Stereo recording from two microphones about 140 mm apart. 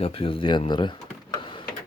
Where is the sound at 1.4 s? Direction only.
35° left (ahead or behind).